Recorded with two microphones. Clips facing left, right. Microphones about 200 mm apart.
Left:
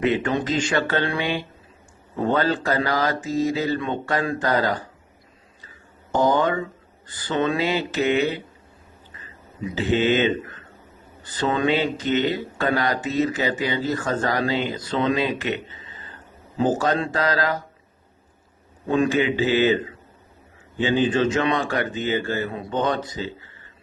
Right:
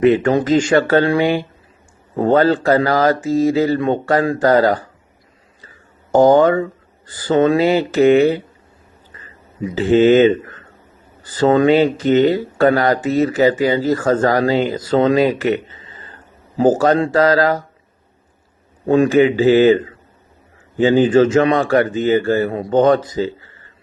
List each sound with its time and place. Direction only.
0.1 s speech: 45° right (ahead or behind)
6.1 s speech: 45° right (ahead or behind)
9.7 s speech: 45° right (ahead or behind)
18.9 s speech: 40° right (ahead or behind)